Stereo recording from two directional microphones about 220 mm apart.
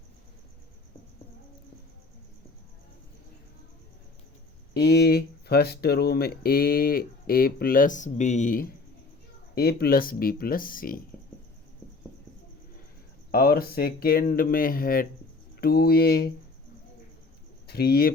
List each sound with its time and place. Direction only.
4.8 s speech: 50° left (ahead or behind)
13.3 s speech: 45° left (ahead or behind)
17.7 s speech: 45° left (ahead or behind)